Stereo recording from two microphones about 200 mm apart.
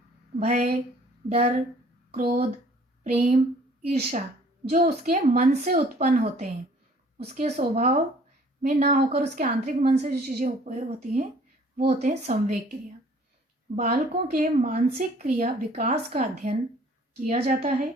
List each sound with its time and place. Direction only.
0.3 s a woman's voice: 40° right (ahead or behind)
1.3 s speech: 30° right (ahead or behind)
2.1 s a woman's voice: 45° right (ahead or behind)
4.7 s speech: 40° right (ahead or behind)
7.2 s speech: 35° right (ahead or behind)
8.6 s a woman's voice: 45° right (ahead or behind)
9.6 s speech: 35° right (ahead or behind)
13.7 s speech: 45° right (ahead or behind)